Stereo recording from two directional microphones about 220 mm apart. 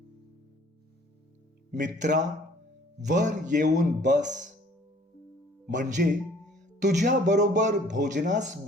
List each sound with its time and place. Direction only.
1.7 s speech: 35° right (ahead or behind)
5.7 s speech: 35° right (ahead or behind)